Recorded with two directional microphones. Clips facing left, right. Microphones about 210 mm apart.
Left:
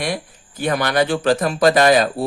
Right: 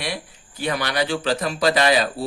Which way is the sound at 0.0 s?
50° left (ahead or behind).